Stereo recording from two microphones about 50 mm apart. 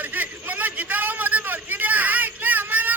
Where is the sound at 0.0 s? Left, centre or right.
Right.